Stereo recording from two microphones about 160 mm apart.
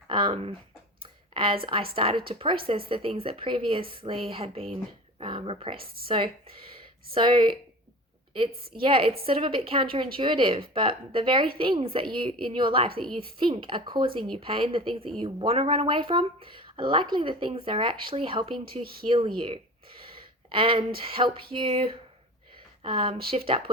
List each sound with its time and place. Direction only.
0.1 s speech: 30° right (ahead or behind)
8.8 s speech: 35° right (ahead or behind)
20.5 s speech: 35° right (ahead or behind)